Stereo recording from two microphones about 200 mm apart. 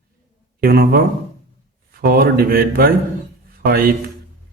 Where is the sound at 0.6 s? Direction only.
50° right (ahead or behind).